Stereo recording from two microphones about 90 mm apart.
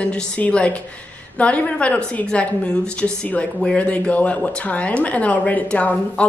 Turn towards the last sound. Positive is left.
turn(degrees=15)  # may be behind; listen again after turning